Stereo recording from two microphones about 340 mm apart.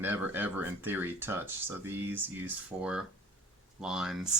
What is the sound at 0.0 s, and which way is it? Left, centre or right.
Speech, centre.